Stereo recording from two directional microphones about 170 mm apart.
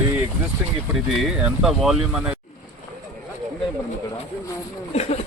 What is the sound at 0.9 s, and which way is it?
A man's voice, centre (ahead or behind).